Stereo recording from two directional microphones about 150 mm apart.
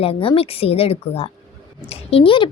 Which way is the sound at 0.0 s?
40° left (ahead or behind).